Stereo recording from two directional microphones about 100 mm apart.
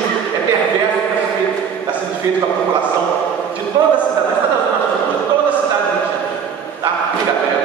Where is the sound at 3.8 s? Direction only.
50° right (ahead or behind).